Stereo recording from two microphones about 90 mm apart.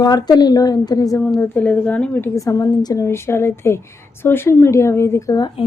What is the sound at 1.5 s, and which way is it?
Speech, 20° left (ahead or behind).